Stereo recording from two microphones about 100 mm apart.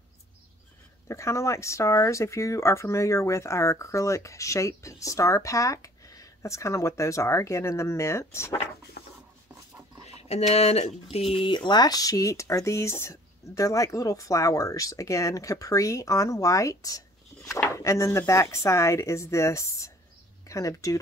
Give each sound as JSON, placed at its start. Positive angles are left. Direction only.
{"t": 1.0, "sound": "speech", "side_deg": 30}
{"t": 10.0, "sound": "speech", "side_deg": 90}
{"t": 11.5, "sound": "speech", "side_deg": 50}